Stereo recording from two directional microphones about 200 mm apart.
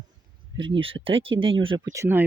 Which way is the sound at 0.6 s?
25° right (ahead or behind).